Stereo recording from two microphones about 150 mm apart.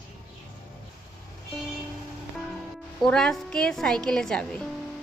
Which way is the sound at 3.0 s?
5° left (ahead or behind).